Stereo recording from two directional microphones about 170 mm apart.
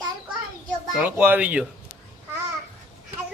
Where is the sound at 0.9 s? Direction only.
10° right (ahead or behind).